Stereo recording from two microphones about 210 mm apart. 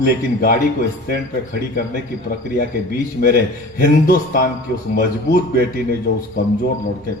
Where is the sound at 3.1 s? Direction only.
45° left (ahead or behind).